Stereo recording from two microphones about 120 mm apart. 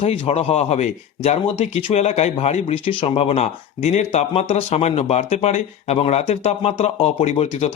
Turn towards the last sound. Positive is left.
turn(degrees=55)  # may be behind; listen again after turning